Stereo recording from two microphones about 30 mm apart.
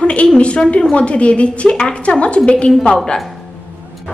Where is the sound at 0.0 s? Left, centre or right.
Left.